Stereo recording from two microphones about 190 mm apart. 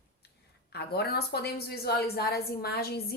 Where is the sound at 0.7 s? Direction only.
55° left (ahead or behind).